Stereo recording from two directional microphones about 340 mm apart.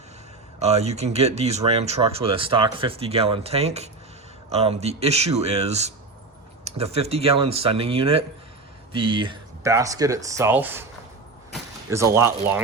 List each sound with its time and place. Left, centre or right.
0.6 s speech: centre